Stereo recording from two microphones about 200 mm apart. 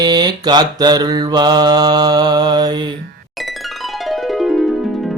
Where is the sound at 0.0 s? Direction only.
20° right (ahead or behind).